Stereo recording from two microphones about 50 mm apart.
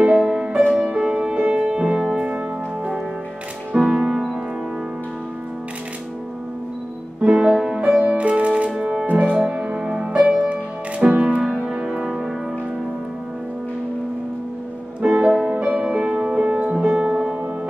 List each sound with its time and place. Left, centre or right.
0.1 s music: centre
3.7 s music: centre
7.2 s music: right
9.3 s music: centre
10.4 s music: right
11.9 s music: centre
15.0 s music: right